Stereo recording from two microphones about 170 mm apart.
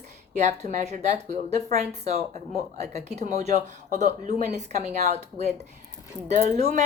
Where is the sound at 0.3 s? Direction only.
40° right (ahead or behind).